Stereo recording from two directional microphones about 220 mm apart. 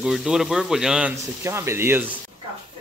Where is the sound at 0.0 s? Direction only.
Centre (ahead or behind).